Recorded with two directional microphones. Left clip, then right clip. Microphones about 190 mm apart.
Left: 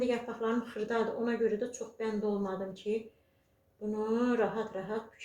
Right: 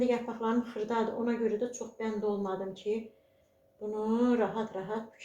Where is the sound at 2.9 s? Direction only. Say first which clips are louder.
Right 1 dB; 10° right (ahead or behind).